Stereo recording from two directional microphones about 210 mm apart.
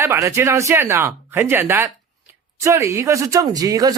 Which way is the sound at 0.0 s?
15° right (ahead or behind).